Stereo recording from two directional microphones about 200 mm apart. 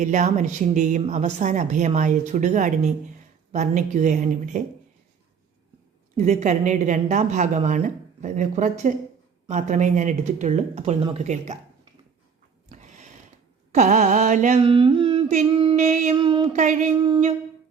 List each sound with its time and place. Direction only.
0.0 s speech: 40° right (ahead or behind)
6.1 s speech: 35° right (ahead or behind)
12.6 s a sound: 35° right (ahead or behind)
13.7 s speech: 35° right (ahead or behind)
15.7 s speech: 35° right (ahead or behind)
16.1 s a sound: 25° right (ahead or behind)
16.6 s speech: 40° right (ahead or behind)